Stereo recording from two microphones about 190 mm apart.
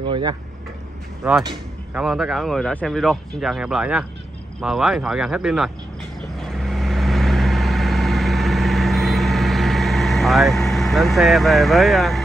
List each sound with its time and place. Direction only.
0.1 s speech: 25° right (ahead or behind)
1.2 s speech: 5° right (ahead or behind)
6.3 s vehicle: centre (ahead or behind)